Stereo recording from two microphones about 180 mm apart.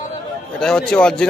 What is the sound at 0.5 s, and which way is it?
Speech, 5° left (ahead or behind).